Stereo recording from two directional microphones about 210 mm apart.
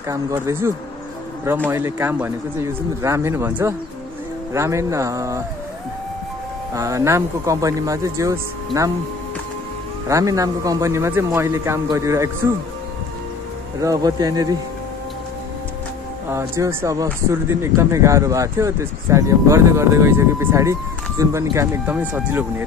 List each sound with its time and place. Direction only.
0.1 s speech: 10° right (ahead or behind)
6.7 s speech: 15° right (ahead or behind)
10.0 s speech: 15° right (ahead or behind)
13.7 s speech: 15° right (ahead or behind)
16.3 s speech: 15° right (ahead or behind)